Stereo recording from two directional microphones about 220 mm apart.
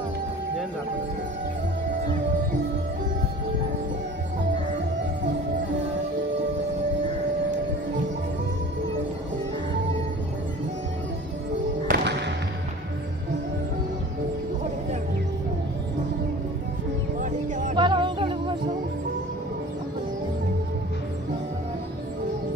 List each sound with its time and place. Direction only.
11.9 s music: 50° right (ahead or behind)
17.2 s music: 35° right (ahead or behind)
17.7 s music: 20° right (ahead or behind)